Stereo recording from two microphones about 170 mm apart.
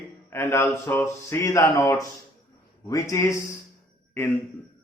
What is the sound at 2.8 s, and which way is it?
Speech, 20° left (ahead or behind).